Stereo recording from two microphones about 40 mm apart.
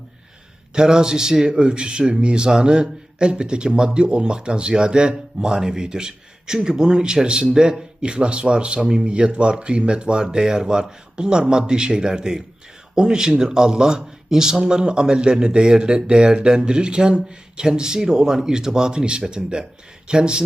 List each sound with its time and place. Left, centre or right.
0.7 s a man's voice: centre